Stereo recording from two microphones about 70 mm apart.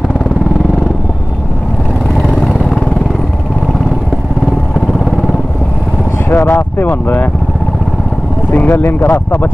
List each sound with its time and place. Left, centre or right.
2.2 s vehicle: centre
6.3 s a sound: left
8.5 s speech: left